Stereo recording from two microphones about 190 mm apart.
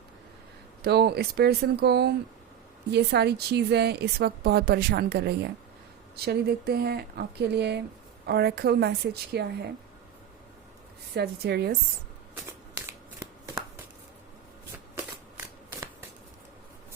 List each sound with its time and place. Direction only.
0.8 s a woman's voice: 60° right (ahead or behind)
11.1 s a woman's voice: 60° right (ahead or behind)